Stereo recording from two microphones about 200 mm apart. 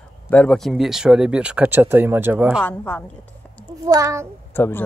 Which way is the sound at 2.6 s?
10° left (ahead or behind).